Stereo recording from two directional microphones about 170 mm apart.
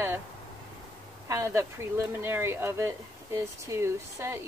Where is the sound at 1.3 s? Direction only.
15° right (ahead or behind).